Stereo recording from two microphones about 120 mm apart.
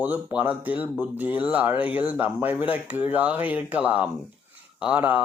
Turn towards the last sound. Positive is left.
turn(degrees=-10)  # may be behind; listen again after turning